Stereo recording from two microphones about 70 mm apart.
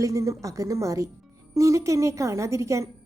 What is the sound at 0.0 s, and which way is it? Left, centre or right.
A woman's voice, right.